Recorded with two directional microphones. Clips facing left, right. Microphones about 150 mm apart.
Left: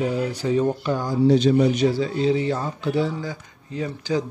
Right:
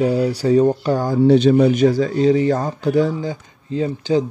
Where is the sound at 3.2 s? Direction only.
30° right (ahead or behind).